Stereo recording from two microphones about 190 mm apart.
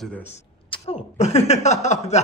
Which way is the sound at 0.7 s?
30° left (ahead or behind).